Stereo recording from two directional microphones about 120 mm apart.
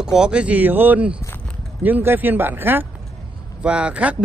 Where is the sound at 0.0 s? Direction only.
5° right (ahead or behind).